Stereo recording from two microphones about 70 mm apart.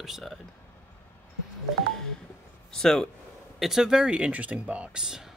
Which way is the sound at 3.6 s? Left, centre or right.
Centre.